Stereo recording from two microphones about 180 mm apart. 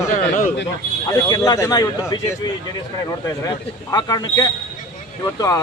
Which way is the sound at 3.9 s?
20° left (ahead or behind).